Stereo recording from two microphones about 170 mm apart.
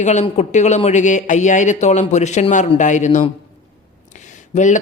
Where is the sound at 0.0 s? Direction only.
45° left (ahead or behind).